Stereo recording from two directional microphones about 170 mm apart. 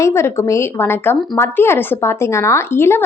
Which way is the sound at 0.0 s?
15° left (ahead or behind).